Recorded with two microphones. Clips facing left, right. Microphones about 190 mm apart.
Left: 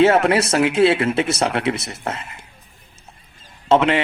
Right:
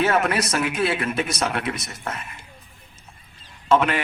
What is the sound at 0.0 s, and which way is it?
Speech, 30° left (ahead or behind).